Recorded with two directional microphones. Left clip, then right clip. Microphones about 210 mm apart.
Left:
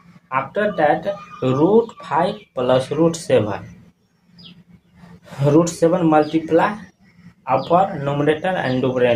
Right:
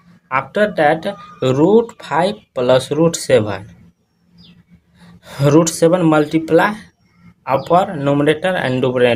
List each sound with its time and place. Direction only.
0.3 s speech: 40° right (ahead or behind)
5.2 s speech: 40° right (ahead or behind)